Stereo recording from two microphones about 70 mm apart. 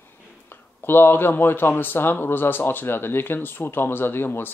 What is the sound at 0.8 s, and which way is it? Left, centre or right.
Speech, left.